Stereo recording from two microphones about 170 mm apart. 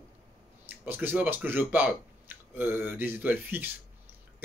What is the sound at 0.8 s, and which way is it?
Speech, 10° right (ahead or behind).